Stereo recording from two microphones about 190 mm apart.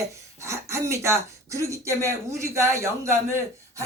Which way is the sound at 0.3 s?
15° right (ahead or behind).